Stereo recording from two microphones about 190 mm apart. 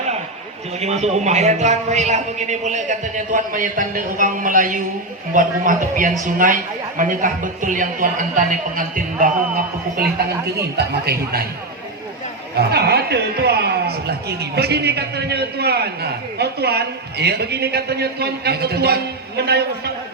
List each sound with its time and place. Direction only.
0.8 s a man's voice: 35° right (ahead or behind)
10.8 s a woman's voice: 55° right (ahead or behind)
12.5 s a woman's voice: 55° right (ahead or behind)